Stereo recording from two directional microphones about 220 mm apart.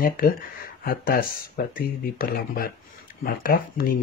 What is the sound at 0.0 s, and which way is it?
Speech, 40° left (ahead or behind).